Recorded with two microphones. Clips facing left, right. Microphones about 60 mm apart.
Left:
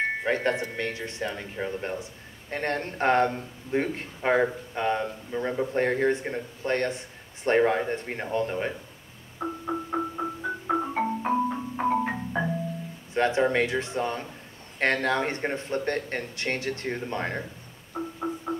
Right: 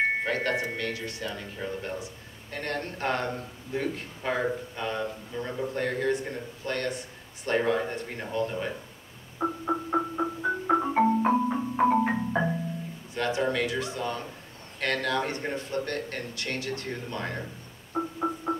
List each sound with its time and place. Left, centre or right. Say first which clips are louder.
0.2 s a man's voice: left 2 dB; left
9.4 s marimba: right 2 dB; centre
13.1 s a man's voice: left 4 dB; left
17.9 s music: right 2 dB; centre